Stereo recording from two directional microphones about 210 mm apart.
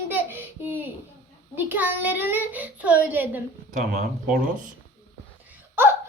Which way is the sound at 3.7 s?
35° right (ahead or behind).